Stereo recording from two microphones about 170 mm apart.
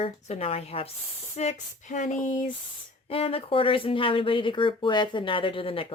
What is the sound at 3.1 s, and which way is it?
Speech, 35° left (ahead or behind).